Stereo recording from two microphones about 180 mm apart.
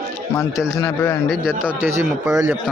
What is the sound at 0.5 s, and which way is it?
Speech, centre (ahead or behind).